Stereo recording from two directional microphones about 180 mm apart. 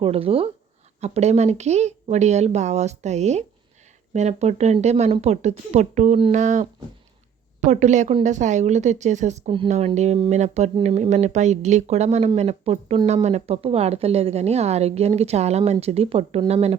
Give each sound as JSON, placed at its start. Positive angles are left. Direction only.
{"t": 0.0, "sound": "a woman's voice", "side_deg": -30}